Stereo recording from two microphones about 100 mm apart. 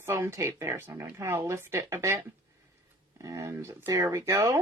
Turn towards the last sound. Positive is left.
turn(degrees=-30)  # may be behind; listen again after turning